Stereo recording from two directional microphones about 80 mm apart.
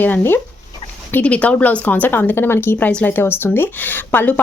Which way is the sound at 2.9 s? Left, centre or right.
Centre.